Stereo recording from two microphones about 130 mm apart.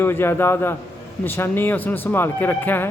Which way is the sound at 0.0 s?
15° left (ahead or behind).